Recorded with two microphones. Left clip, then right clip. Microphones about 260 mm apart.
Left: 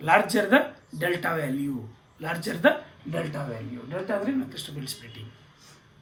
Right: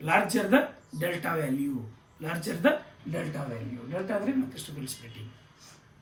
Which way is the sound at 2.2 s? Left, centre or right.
Centre.